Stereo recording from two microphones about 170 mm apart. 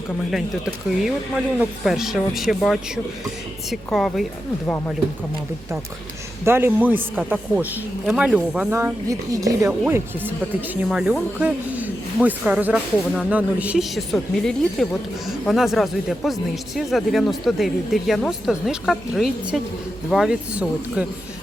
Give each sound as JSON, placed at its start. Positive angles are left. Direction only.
{"t": 0.3, "sound": "speech", "side_deg": 0}
{"t": 6.4, "sound": "a man's voice", "side_deg": -15}
{"t": 8.7, "sound": "a man's voice", "side_deg": -15}